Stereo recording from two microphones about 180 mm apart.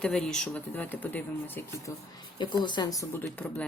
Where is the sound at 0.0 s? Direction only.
5° left (ahead or behind).